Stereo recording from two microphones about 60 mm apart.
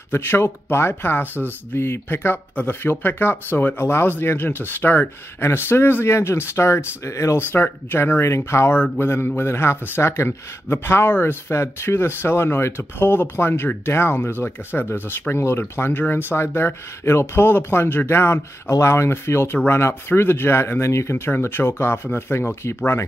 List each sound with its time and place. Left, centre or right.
0.1 s a man's voice: left
7.3 s a man's voice: left
8.9 s a man's voice: left
21.4 s a man's voice: left